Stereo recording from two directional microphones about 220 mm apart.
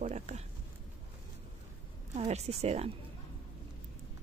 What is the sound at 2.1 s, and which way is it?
Speech, 30° right (ahead or behind).